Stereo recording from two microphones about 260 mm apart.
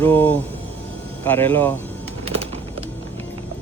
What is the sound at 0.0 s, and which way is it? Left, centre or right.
Speech, centre.